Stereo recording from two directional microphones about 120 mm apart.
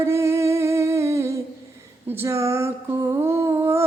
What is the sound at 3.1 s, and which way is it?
Humming, 25° right (ahead or behind).